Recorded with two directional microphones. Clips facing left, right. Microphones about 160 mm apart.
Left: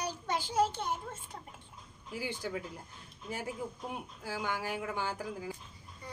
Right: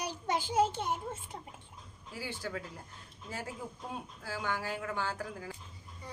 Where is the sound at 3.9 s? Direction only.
15° left (ahead or behind).